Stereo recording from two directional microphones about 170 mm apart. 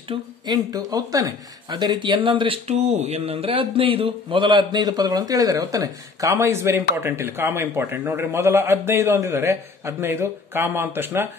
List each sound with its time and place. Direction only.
0.1 s speech: 25° right (ahead or behind)